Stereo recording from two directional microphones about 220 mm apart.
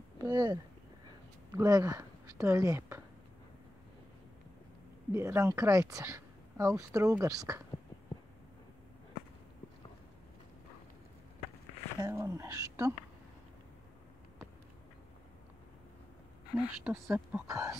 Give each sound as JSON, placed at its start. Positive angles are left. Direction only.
{"t": 0.2, "sound": "a woman's voice", "side_deg": -20}
{"t": 5.1, "sound": "speech", "side_deg": -10}
{"t": 12.0, "sound": "speech", "side_deg": -15}
{"t": 16.5, "sound": "speech", "side_deg": -5}